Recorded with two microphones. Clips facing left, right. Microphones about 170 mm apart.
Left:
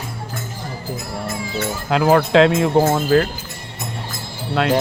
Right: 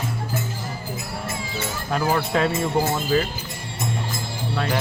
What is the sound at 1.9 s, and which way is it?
Speech, 90° left.